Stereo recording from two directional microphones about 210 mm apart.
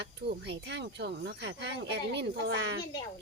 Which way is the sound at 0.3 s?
50° right (ahead or behind).